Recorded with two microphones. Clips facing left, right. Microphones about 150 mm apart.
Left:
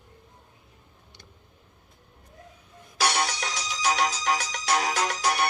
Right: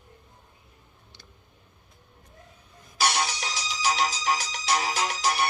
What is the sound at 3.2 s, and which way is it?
Music, 55° left (ahead or behind).